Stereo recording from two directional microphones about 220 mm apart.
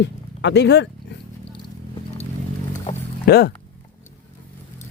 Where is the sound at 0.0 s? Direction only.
50° left (ahead or behind).